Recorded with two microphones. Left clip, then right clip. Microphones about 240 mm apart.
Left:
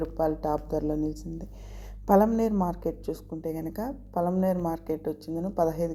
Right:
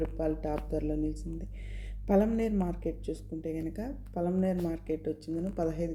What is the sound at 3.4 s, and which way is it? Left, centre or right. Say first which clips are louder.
Speech: left 3 dB; left.